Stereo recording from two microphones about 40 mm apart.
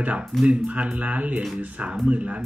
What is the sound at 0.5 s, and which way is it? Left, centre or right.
Speech, right.